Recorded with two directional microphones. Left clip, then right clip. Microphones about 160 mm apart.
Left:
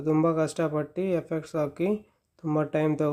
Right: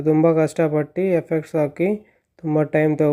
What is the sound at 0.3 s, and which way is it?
Speech, 25° right (ahead or behind).